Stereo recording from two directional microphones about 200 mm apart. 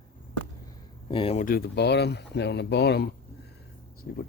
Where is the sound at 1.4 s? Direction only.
50° left (ahead or behind).